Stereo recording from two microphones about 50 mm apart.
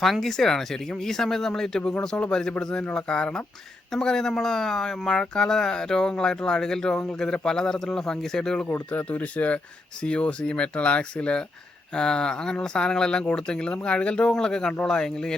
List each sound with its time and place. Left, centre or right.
0.0 s speech: centre
8.9 s speech: left; by 15.4 s centre